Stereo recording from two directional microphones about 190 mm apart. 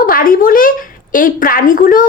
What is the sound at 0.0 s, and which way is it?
A woman's voice, 50° left (ahead or behind).